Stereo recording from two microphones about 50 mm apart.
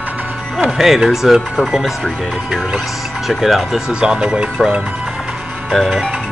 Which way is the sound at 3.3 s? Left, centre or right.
Centre.